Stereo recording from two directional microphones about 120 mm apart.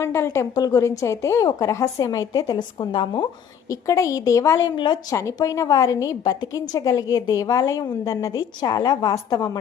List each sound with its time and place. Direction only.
0.0 s a woman's voice: 20° left (ahead or behind); by 3.2 s 40° left (ahead or behind)
3.7 s a woman's voice: 25° left (ahead or behind)